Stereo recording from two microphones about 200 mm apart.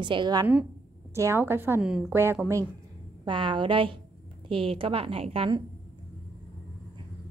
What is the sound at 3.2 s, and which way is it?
A woman's voice, 25° right (ahead or behind).